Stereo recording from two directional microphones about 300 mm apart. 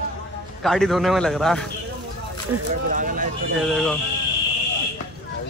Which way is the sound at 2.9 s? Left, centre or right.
Right.